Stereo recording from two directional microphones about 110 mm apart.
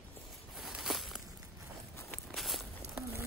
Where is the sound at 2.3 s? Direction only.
Centre (ahead or behind).